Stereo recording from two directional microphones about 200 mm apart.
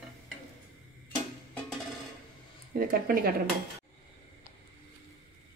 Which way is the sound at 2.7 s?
45° right (ahead or behind).